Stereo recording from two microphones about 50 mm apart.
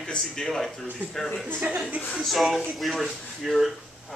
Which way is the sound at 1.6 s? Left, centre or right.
Right.